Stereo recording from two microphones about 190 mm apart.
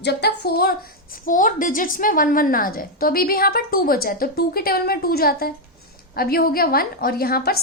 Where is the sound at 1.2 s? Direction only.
45° left (ahead or behind).